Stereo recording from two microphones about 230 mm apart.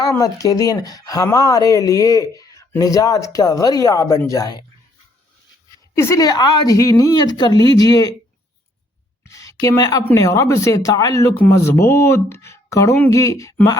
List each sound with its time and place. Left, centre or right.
0.0 s speech: centre
5.9 s speech: centre
9.2 s speech: centre